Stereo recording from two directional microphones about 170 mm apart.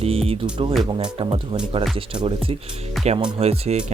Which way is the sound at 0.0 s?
35° right (ahead or behind).